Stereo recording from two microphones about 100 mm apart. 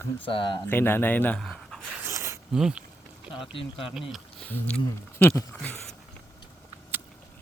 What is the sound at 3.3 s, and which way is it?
Speech, 60° left (ahead or behind).